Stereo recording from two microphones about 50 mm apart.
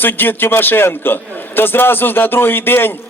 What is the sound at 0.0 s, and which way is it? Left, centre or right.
A man's voice, left.